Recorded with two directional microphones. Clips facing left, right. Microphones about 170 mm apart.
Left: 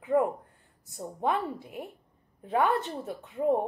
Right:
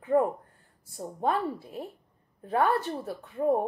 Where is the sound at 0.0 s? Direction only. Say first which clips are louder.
Right 1 dB; 15° left (ahead or behind).